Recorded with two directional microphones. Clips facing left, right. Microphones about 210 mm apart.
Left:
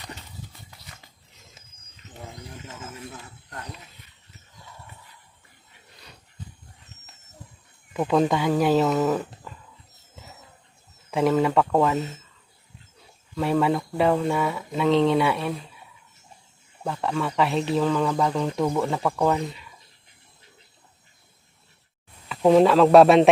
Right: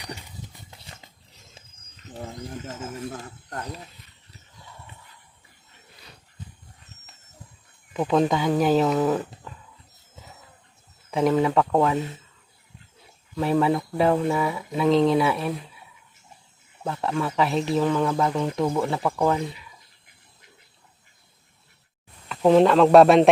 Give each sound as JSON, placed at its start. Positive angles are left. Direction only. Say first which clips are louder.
{"t": 2.6, "sound": "speech", "louder": "right 5 dB", "side_deg": -45}
{"t": 7.9, "sound": "speech", "louder": "even", "side_deg": 0}
{"t": 11.1, "sound": "speech", "louder": "even", "side_deg": 0}
{"t": 13.3, "sound": "speech", "louder": "right 1 dB", "side_deg": 0}
{"t": 16.8, "sound": "speech", "louder": "even", "side_deg": 0}
{"t": 22.3, "sound": "speech", "louder": "even", "side_deg": 0}